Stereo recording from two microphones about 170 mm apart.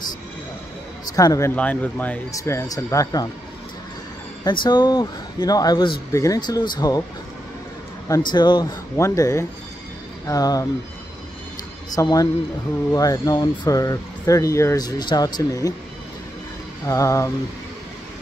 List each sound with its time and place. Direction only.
1.0 s speech: 20° left (ahead or behind)
4.5 s speech: 25° left (ahead or behind)
8.3 s speech: 25° left (ahead or behind)
11.9 s speech: 20° left (ahead or behind)
16.8 s speech: 20° left (ahead or behind)